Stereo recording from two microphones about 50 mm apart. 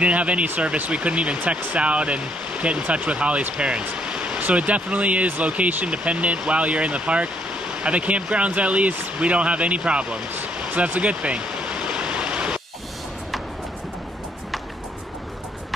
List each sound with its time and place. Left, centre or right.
0.0 s speech: right
10.6 s stream: right